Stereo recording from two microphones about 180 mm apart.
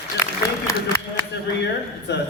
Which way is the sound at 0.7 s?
15° left (ahead or behind).